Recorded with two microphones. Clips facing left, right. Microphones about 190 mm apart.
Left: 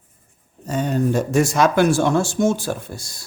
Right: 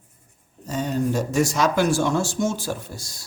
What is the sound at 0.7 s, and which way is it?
Speech, 55° left (ahead or behind).